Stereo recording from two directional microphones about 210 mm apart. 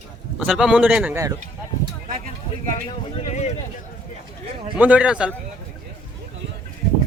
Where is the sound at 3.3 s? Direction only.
35° left (ahead or behind).